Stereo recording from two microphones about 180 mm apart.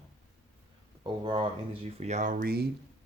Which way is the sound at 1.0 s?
25° right (ahead or behind).